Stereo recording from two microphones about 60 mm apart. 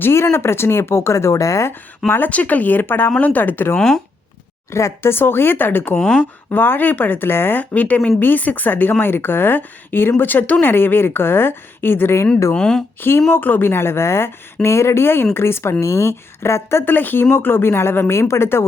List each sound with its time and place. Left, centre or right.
0.0 s speech: left
2.0 s speech: left
3.8 s speech: centre
4.7 s speech: left
6.0 s speech: centre
6.5 s speech: left
12.5 s speech: centre
13.0 s speech: left
15.8 s speech: left